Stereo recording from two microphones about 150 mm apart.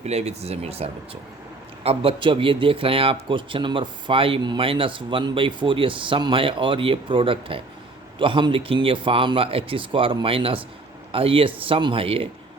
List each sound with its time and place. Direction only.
0.0 s a man's voice: 45° right (ahead or behind)